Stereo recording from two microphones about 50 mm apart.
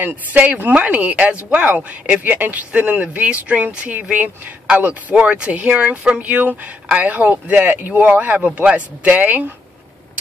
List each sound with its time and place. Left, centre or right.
0.0 s speech: right